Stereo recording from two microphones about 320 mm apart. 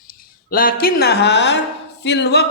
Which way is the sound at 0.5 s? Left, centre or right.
Left.